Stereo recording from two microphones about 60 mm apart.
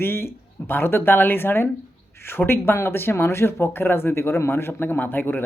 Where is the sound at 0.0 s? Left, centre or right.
Left.